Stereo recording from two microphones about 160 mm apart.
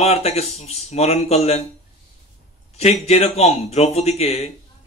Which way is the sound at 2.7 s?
40° left (ahead or behind).